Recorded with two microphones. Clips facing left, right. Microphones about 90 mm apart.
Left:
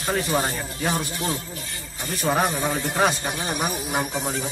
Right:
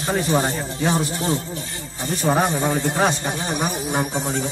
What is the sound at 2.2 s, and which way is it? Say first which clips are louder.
Speech: right 3 dB; 5° right (ahead or behind).